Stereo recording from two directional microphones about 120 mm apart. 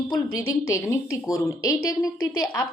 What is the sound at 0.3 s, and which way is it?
A woman's voice, 25° left (ahead or behind).